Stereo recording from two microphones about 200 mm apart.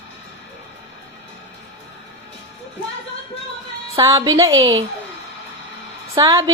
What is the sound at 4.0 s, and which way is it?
Speech, 20° right (ahead or behind).